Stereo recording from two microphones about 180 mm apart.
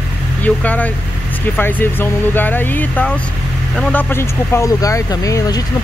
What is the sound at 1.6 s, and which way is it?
Speech, 10° left (ahead or behind).